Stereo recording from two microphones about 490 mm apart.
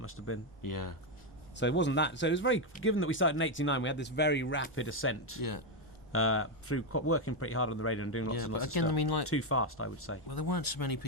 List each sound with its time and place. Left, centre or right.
0.0 s speech: left
0.6 s speech: left
1.5 s speech: left
5.4 s speech: left
6.1 s speech: left
8.5 s speech: left
9.2 s speech: left
10.2 s speech: left